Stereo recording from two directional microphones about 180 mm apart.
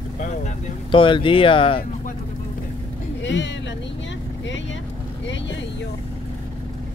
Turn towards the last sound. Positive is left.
turn(degrees=85)